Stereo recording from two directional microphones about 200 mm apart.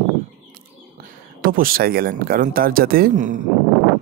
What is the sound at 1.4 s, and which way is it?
Speech, 45° right (ahead or behind).